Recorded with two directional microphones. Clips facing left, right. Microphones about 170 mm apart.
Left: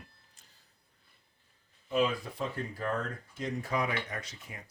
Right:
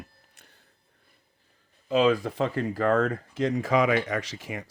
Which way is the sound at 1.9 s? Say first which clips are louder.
Right 8 dB; 90° right.